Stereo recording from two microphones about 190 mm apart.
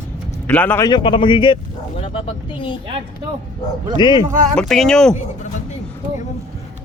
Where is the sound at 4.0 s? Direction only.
25° left (ahead or behind).